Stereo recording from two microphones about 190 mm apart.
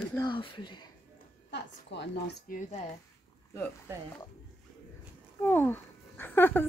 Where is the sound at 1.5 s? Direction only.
65° left (ahead or behind).